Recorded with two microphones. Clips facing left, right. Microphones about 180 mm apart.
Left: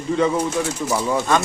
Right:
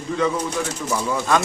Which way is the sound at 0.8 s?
Centre (ahead or behind).